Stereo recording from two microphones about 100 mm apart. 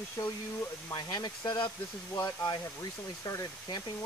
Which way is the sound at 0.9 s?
45° left (ahead or behind).